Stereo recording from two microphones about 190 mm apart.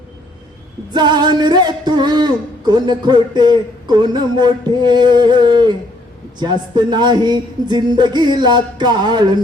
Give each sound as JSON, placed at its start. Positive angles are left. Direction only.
{"t": 0.9, "sound": "music", "side_deg": -25}